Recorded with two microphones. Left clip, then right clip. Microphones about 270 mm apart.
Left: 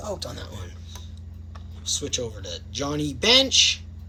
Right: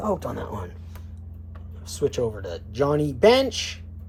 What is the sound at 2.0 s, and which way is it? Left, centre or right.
Speech, centre.